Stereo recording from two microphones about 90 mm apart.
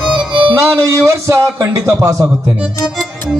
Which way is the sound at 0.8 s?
35° right (ahead or behind).